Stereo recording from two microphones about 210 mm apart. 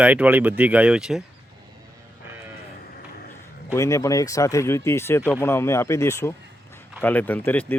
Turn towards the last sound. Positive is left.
turn(degrees=10)  # may be behind; listen again after turning